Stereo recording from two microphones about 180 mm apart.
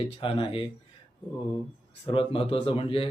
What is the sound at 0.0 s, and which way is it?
Speech, 30° left (ahead or behind).